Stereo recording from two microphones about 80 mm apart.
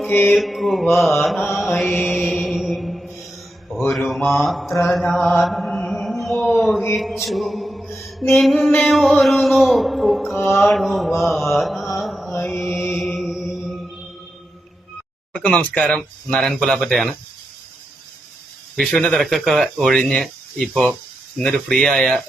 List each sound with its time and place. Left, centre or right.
0.1 s mantra: left
0.3 s speech: centre
2.5 s mantra: centre
3.9 s speech: centre
5.2 s mantra: centre
7.0 s a sound: centre
8.3 s speech: centre
10.3 s mantra: left
10.6 s mantra: centre
12.6 s music: centre
13.0 s music: centre
15.3 s speech: centre
15.8 s speech: centre
19.0 s speech: centre